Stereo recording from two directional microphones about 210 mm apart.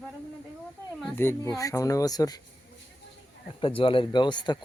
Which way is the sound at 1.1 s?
10° left (ahead or behind).